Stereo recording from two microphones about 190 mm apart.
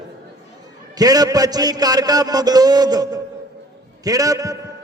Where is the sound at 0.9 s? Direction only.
20° right (ahead or behind).